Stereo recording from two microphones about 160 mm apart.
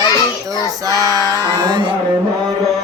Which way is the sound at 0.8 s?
20° right (ahead or behind).